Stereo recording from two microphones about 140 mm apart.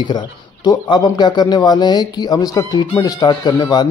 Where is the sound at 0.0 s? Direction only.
30° left (ahead or behind).